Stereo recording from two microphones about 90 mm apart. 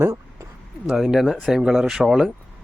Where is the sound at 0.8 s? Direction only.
5° right (ahead or behind).